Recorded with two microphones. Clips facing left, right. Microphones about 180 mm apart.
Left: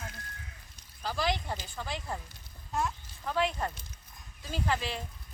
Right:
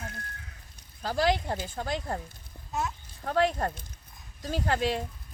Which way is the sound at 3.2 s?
50° right (ahead or behind).